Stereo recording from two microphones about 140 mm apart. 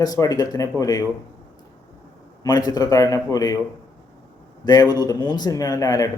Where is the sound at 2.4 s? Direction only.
25° left (ahead or behind).